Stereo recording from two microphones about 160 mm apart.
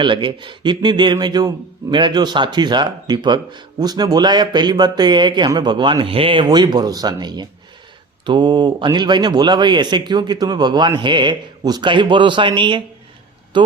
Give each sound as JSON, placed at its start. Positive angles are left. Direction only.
{"t": 0.0, "sound": "a man's voice", "side_deg": -30}